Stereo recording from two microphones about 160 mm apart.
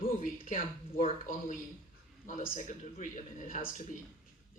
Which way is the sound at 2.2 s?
60° left (ahead or behind).